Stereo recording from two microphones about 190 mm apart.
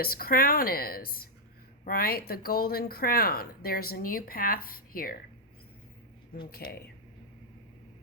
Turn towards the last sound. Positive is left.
turn(degrees=55)  # may be behind; listen again after turning